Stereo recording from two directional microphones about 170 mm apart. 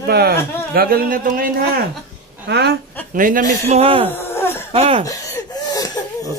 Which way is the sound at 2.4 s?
80° right.